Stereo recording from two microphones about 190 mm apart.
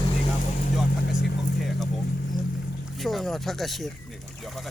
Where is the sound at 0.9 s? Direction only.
60° left (ahead or behind).